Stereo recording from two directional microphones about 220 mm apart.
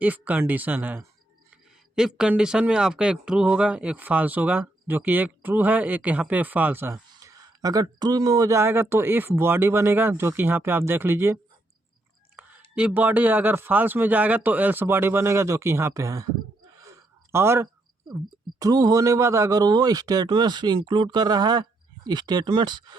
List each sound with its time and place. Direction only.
0.0 s speech: 5° right (ahead or behind)
12.4 s whispering: 5° right (ahead or behind)
12.7 s speech: 5° right (ahead or behind)
16.7 s gasp: 15° right (ahead or behind)
18.6 s speech: 15° right (ahead or behind)